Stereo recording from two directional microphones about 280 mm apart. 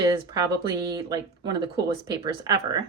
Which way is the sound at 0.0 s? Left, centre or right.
Centre.